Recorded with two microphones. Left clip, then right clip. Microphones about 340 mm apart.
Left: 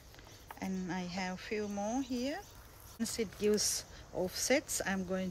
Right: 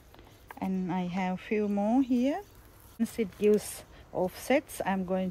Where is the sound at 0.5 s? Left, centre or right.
Centre.